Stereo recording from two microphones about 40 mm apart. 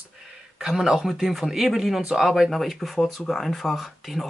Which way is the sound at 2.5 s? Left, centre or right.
Centre.